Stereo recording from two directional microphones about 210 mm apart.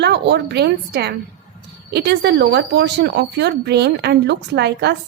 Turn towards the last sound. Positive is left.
turn(degrees=-50)  # may be behind; listen again after turning